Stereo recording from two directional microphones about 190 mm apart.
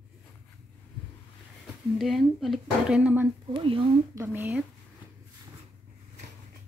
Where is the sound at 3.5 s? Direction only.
25° right (ahead or behind).